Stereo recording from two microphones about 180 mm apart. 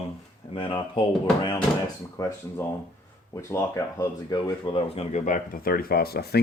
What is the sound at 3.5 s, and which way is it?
Speech, 15° left (ahead or behind).